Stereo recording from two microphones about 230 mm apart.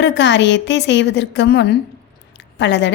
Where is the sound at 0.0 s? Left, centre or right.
Left.